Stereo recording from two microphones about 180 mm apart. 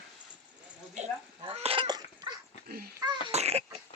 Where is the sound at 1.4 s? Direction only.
35° right (ahead or behind).